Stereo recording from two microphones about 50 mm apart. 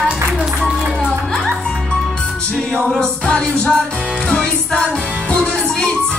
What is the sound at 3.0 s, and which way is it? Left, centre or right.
Music, centre.